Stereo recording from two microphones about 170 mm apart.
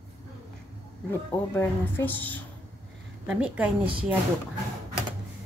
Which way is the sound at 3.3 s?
5° right (ahead or behind).